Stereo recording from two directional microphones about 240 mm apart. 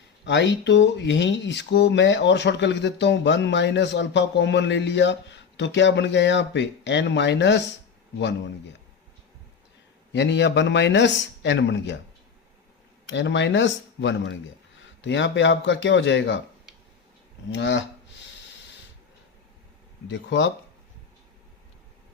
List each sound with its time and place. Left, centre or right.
0.3 s speech: left
10.1 s speech: left
13.1 s speech: left
17.5 s speech: left
20.1 s speech: left